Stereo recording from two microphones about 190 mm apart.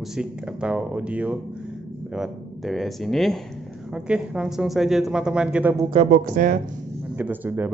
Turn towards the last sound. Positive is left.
turn(degrees=-10)  # may be behind; listen again after turning